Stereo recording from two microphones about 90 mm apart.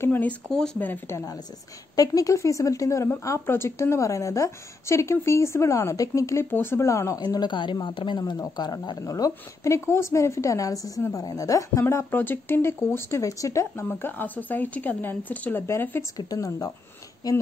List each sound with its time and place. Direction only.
0.0 s speech: 20° left (ahead or behind)
1.1 s a woman's voice: 40° left (ahead or behind)
6.5 s a woman's voice: 25° left (ahead or behind)
7.2 s speech: 50° left (ahead or behind)
8.2 s speech: 45° left (ahead or behind)
9.0 s a woman's voice: 40° left (ahead or behind)
11.9 s speech: 25° left (ahead or behind)
16.2 s a woman's voice: 40° left (ahead or behind)